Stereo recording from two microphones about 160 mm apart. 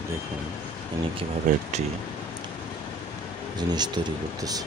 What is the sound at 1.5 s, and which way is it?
Speech, 55° right (ahead or behind).